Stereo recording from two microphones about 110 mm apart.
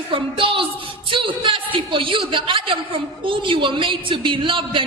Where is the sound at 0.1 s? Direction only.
50° right (ahead or behind).